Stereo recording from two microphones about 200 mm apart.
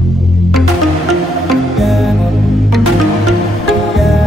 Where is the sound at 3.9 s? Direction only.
Centre (ahead or behind).